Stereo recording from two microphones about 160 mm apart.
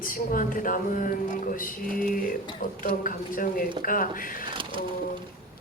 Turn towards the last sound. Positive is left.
turn(degrees=60)  # may be behind; listen again after turning